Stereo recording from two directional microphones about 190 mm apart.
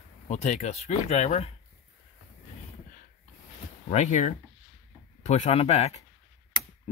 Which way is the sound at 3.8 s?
40° left (ahead or behind).